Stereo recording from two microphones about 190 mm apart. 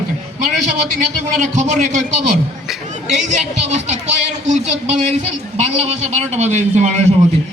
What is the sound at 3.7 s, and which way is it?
A man's voice, 40° right (ahead or behind).